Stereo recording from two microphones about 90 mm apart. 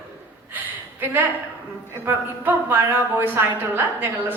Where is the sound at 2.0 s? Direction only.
20° right (ahead or behind).